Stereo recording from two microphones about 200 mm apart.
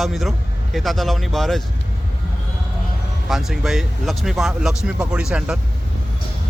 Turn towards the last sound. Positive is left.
turn(degrees=-5)  # may be behind; listen again after turning